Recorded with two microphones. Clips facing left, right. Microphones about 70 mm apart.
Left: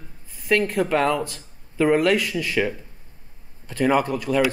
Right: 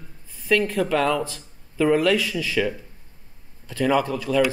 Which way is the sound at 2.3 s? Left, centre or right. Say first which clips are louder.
Left 1 dB; left.